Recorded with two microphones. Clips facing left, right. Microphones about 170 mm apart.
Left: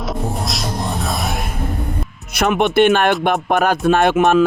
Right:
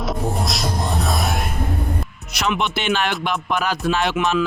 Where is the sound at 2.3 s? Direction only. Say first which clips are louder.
Left 7 dB; 55° left (ahead or behind).